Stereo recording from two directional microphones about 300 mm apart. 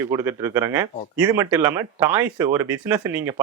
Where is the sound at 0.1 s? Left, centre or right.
Centre.